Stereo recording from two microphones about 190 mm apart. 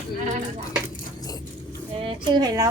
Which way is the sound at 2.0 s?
25° right (ahead or behind).